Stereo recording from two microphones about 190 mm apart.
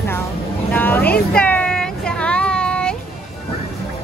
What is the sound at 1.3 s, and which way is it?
Child singing, 5° left (ahead or behind).